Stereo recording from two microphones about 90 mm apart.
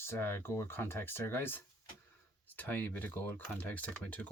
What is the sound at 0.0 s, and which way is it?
Speech, 25° left (ahead or behind).